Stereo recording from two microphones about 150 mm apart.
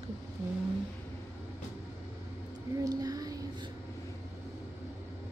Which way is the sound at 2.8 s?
25° right (ahead or behind).